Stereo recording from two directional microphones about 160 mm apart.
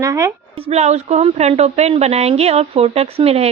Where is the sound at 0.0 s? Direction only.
20° right (ahead or behind).